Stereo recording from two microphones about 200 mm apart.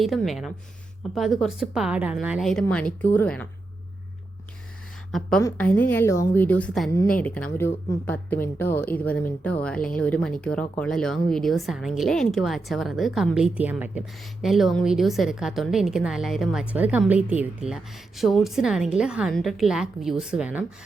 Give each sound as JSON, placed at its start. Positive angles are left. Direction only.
{"t": 0.0, "sound": "speech", "side_deg": 0}
{"t": 5.4, "sound": "speech", "side_deg": 15}